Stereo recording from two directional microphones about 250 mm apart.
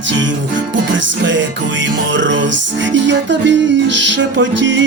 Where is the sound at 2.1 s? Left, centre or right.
Right.